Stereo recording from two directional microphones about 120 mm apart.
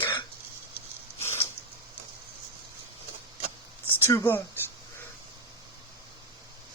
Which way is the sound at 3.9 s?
20° left (ahead or behind).